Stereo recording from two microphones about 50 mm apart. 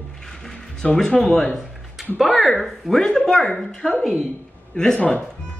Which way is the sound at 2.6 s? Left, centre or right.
Centre.